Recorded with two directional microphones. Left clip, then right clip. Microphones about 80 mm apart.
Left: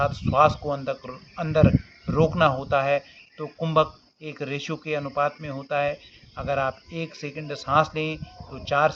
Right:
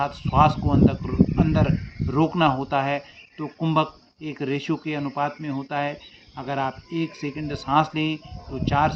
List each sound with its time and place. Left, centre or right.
0.0 s speech: left